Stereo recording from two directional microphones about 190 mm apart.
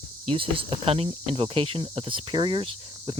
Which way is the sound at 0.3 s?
30° right (ahead or behind).